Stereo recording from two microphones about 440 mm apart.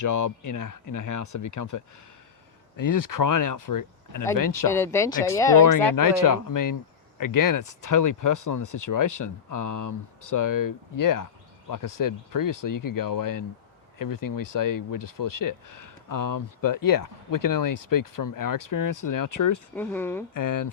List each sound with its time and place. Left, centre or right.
0.0 s speech: left
4.7 s speech: centre
6.0 s speech: left
19.7 s speech: centre
20.3 s speech: left